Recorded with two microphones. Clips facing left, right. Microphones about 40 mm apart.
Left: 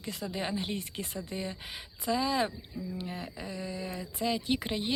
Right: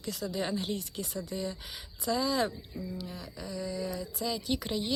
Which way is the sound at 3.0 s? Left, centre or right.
Left.